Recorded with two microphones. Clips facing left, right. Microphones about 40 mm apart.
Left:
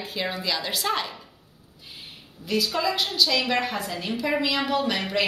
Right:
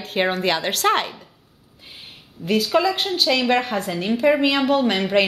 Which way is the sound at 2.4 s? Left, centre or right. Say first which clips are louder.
Right 6 dB; right.